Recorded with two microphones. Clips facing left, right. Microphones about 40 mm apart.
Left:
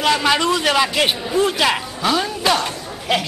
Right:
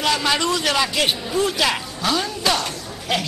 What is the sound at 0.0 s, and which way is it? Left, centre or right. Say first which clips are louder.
A man's voice: left 3 dB; centre.